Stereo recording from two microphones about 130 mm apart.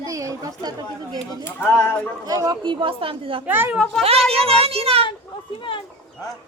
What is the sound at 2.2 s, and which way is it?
Speech, 30° right (ahead or behind).